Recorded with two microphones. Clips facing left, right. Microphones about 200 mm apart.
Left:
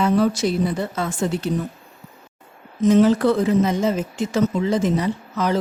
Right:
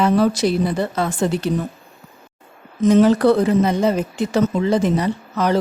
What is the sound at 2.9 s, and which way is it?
Speech, 70° right (ahead or behind).